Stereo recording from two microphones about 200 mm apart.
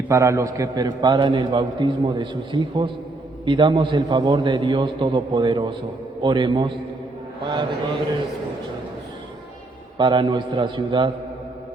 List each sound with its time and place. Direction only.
0.1 s a man's voice: 15° right (ahead or behind)
10.0 s a man's voice: 20° right (ahead or behind)